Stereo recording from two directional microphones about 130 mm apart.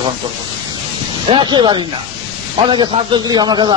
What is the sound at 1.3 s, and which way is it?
A man's voice, 35° right (ahead or behind).